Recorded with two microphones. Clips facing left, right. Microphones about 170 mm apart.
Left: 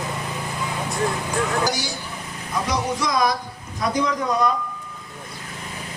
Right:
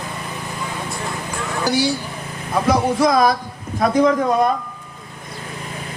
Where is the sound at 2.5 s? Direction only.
55° right (ahead or behind).